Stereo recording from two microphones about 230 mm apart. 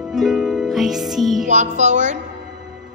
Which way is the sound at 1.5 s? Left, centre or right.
Right.